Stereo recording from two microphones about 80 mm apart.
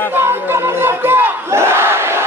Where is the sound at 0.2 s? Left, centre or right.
Right.